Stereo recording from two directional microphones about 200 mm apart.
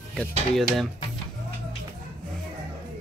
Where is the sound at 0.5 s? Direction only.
Centre (ahead or behind).